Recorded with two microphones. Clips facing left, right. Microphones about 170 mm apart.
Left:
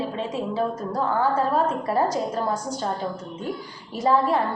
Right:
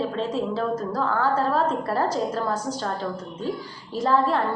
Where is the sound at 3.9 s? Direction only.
10° left (ahead or behind).